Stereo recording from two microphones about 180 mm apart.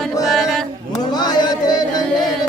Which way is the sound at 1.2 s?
25° left (ahead or behind).